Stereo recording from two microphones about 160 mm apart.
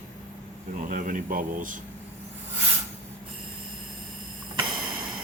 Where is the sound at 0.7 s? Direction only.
60° right (ahead or behind).